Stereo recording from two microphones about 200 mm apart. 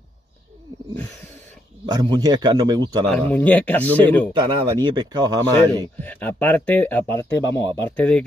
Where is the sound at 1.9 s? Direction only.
20° right (ahead or behind).